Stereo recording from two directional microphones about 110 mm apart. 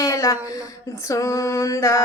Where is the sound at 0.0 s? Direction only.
30° left (ahead or behind).